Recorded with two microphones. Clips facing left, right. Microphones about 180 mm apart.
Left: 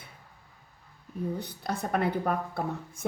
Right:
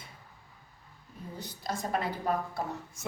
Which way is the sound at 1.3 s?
60° left (ahead or behind).